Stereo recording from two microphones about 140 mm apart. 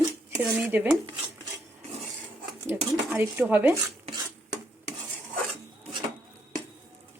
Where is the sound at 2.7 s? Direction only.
15° right (ahead or behind).